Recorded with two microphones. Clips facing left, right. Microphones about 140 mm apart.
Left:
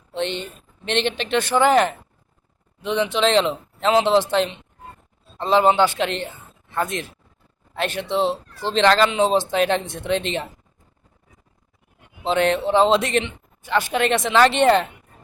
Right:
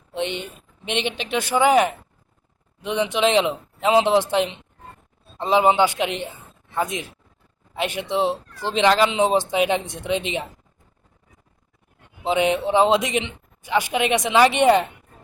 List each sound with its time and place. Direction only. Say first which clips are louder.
0.1 s speech: left 1 dB; 15° right (ahead or behind)
12.2 s speech: left 1 dB; 10° right (ahead or behind)